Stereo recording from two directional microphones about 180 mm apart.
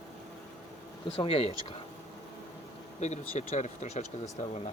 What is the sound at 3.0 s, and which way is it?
Speech, 40° left (ahead or behind).